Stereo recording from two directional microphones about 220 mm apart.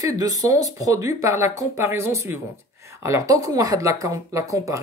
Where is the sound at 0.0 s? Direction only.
15° right (ahead or behind).